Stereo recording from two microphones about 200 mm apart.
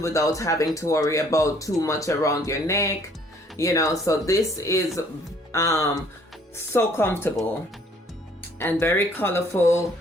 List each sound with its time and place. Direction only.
0.0 s speech: 15° left (ahead or behind)
8.4 s speech: 10° left (ahead or behind)